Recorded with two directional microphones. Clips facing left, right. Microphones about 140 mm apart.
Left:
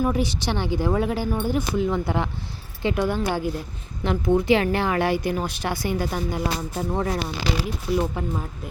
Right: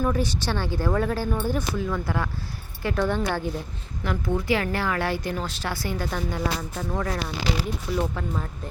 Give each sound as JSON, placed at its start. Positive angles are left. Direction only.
{"t": 0.0, "sound": "speech", "side_deg": 15}